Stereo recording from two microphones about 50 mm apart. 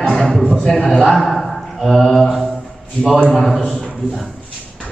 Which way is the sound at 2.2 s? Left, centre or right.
Centre.